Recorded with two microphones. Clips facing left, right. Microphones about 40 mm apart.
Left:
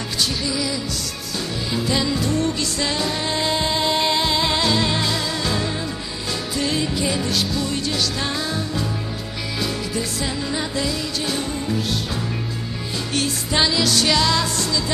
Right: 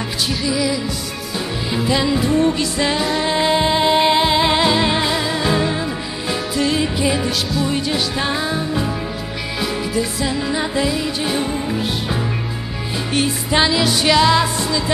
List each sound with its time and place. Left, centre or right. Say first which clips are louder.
0.5 s music: right 5 dB; centre
1.9 s music: right 5 dB; centre
6.5 s music: right 4 dB; centre
6.8 s music: right 4 dB; centre
9.9 s music: right 5 dB; centre
10.4 s music: right 5 dB; centre
13.1 s music: right 5 dB; centre